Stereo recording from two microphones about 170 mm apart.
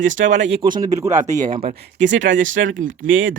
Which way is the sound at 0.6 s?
20° right (ahead or behind).